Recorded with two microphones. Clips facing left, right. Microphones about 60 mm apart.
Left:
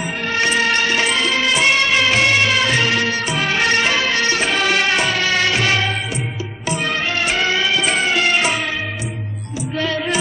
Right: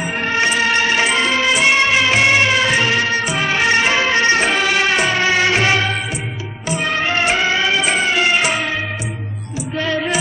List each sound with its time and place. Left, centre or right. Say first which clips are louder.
0.3 s music: right 1 dB; centre
4.6 s music: right 1 dB; centre
5.1 s music: right 3 dB; centre
7.0 s music: right 3 dB; right
9.8 s music: right 1 dB; centre